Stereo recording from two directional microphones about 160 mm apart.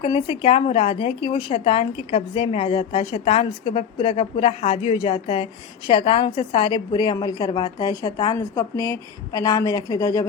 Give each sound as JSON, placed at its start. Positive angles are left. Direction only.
{"t": 0.0, "sound": "a woman's voice", "side_deg": 35}